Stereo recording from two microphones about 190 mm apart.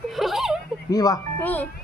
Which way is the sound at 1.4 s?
10° left (ahead or behind).